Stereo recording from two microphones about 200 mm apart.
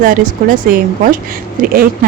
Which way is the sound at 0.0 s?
40° right (ahead or behind).